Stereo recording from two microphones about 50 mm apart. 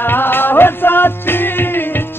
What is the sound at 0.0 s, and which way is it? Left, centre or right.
Music, left.